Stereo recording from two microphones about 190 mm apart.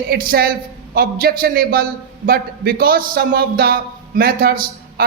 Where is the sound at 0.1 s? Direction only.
50° right (ahead or behind).